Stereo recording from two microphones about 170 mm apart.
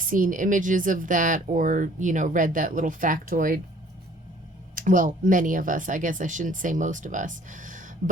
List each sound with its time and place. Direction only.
0.0 s speech: 55° right (ahead or behind)
4.7 s speech: 50° right (ahead or behind)